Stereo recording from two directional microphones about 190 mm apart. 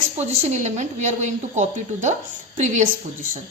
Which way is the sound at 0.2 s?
40° right (ahead or behind).